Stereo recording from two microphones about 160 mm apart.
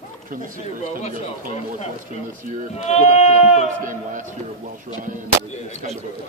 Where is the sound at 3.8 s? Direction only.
55° right (ahead or behind).